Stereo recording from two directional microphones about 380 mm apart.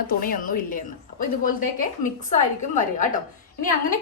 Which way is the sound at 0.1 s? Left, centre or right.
Left.